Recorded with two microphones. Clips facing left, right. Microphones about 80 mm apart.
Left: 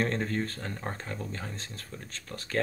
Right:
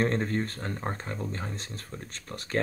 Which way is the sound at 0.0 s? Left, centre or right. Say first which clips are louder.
Right 2 dB; right.